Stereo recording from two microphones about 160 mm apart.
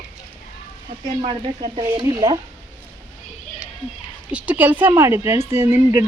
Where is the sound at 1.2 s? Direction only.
35° right (ahead or behind).